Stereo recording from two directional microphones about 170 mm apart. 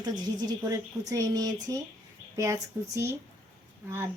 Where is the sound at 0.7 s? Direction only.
20° right (ahead or behind).